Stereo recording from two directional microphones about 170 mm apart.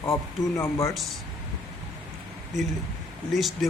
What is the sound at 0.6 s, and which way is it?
Speech, 15° left (ahead or behind).